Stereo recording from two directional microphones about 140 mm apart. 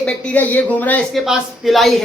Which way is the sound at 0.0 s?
10° left (ahead or behind).